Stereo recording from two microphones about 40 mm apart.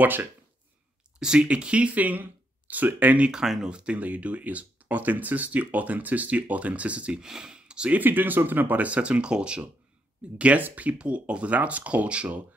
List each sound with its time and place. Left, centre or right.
1.2 s speech: centre
1.5 s speech: right
3.6 s speech: right
4.0 s speech: right
7.2 s speech: centre
7.6 s a sound: right
8.0 s speech: right